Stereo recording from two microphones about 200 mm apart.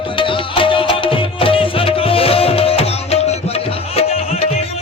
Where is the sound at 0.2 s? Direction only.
25° left (ahead or behind).